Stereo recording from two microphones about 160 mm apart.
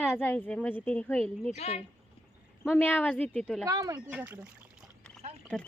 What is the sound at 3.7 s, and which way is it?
Speech, 25° right (ahead or behind).